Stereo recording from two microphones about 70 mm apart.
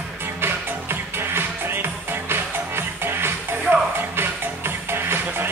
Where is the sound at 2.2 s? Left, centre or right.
Right.